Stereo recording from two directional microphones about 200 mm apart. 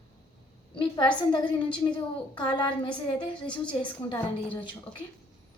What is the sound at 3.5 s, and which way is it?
Speech, 25° left (ahead or behind).